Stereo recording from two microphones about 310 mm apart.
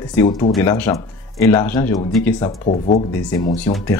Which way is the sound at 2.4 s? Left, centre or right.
Centre.